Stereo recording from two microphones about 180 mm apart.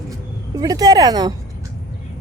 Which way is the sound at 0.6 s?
20° right (ahead or behind).